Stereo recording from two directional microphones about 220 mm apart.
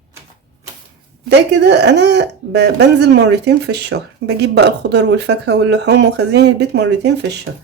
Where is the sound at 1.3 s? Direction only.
50° right (ahead or behind).